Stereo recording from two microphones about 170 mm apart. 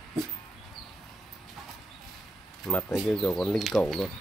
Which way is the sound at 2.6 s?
5° left (ahead or behind).